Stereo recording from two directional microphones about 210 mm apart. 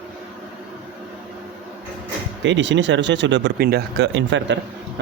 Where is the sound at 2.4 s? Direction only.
60° right (ahead or behind).